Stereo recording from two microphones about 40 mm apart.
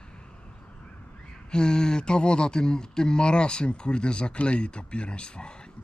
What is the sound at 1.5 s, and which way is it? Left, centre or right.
Speech, left.